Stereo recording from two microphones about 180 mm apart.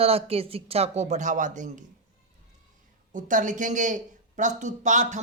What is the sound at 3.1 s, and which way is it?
Speech, 45° right (ahead or behind).